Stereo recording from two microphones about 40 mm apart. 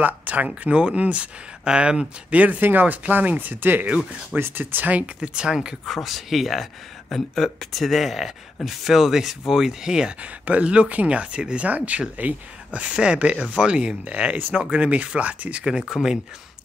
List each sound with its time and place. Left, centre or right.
0.0 s speech: right
0.7 s speech: right
1.6 s speech: right
2.3 s speech: right
4.4 s speech: right
4.8 s speech: right
5.2 s speech: right
5.9 s speech: centre
10.4 s speech: right
15.6 s speech: centre